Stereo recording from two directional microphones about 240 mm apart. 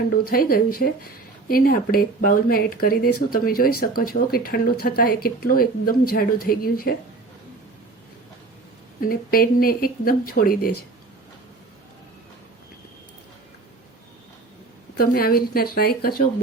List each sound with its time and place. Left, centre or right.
0.3 s speech: left
9.0 s speech: left
14.9 s speech: left